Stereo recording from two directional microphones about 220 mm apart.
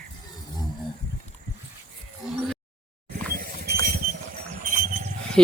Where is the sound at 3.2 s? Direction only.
40° right (ahead or behind).